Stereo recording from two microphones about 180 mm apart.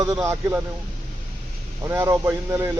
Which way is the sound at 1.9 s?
15° right (ahead or behind).